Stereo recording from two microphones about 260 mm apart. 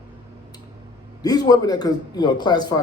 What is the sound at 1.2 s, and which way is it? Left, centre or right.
Speech, centre.